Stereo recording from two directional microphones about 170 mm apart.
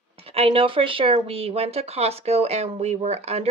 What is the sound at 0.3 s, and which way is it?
Speech, 35° right (ahead or behind).